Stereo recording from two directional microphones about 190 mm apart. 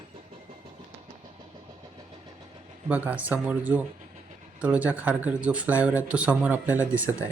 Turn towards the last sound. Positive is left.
turn(degrees=-10)  # may be behind; listen again after turning